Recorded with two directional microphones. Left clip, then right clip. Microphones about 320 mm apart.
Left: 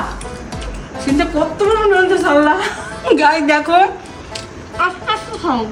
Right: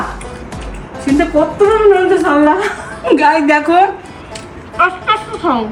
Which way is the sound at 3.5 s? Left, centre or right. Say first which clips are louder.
Right 2 dB; centre.